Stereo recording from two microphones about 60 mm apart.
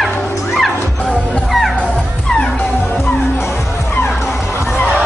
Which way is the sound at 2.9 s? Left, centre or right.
Left.